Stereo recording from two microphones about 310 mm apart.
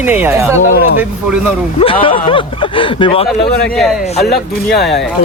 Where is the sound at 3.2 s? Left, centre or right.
Centre.